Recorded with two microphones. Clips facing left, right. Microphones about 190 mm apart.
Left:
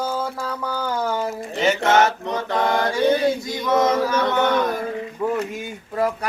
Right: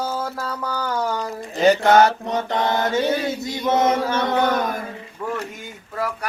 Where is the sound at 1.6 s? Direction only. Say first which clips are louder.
Right 3 dB; 35° right (ahead or behind).